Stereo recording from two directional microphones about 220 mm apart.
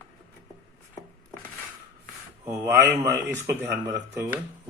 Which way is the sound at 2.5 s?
15° right (ahead or behind).